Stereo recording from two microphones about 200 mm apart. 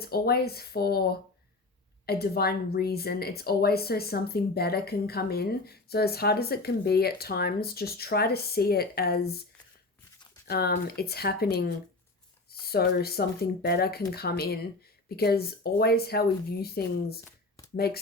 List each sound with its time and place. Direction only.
0.0 s a woman's voice: 50° left (ahead or behind)
2.0 s a woman's voice: 50° left (ahead or behind)
10.4 s a woman's voice: 50° left (ahead or behind)